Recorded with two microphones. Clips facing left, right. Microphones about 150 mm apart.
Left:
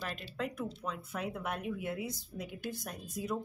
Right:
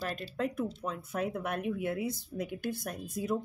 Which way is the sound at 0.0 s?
40° right (ahead or behind).